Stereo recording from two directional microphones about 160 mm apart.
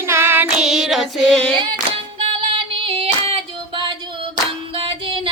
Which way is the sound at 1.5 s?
35° right (ahead or behind).